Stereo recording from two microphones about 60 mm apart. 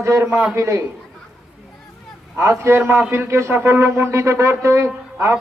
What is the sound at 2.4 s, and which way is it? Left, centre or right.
A man's voice, right.